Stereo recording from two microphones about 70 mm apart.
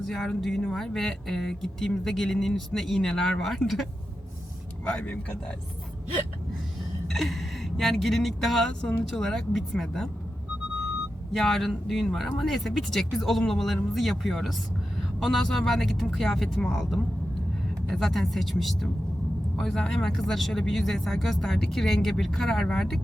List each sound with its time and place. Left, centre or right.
0.0 s speech: centre
4.9 s speech: centre
7.1 s speech: centre
11.3 s speech: centre